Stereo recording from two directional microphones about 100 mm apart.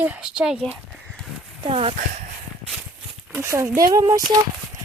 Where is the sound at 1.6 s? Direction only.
70° right (ahead or behind).